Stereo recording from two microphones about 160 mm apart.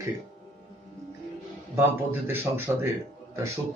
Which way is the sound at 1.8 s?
15° right (ahead or behind).